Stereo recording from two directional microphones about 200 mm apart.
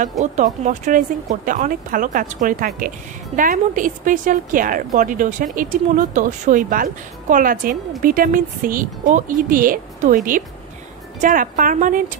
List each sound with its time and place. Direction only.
0.2 s a woman's voice: 35° right (ahead or behind)